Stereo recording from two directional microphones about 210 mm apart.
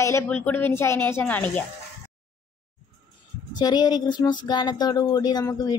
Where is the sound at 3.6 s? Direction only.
20° left (ahead or behind).